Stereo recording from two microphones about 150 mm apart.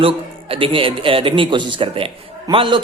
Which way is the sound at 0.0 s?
35° right (ahead or behind).